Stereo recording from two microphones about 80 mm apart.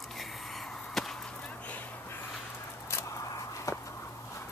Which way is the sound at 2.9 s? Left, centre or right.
Left.